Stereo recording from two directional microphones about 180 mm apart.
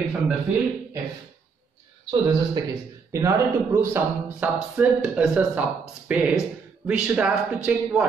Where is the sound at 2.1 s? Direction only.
25° right (ahead or behind).